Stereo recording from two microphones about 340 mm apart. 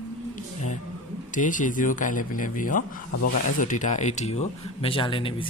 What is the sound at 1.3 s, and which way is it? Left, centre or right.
Speech, left.